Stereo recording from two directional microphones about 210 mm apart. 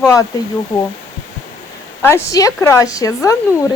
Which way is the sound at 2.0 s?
10° left (ahead or behind).